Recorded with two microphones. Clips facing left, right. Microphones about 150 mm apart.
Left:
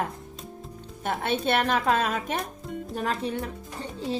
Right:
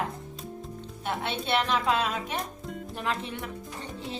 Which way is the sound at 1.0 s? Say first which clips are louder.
Left 5 dB; 45° left (ahead or behind).